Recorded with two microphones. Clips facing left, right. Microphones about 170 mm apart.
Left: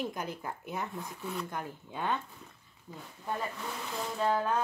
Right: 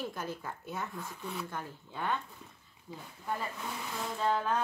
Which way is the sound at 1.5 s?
15° left (ahead or behind).